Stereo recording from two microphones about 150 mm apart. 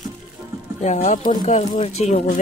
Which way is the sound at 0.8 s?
50° left (ahead or behind).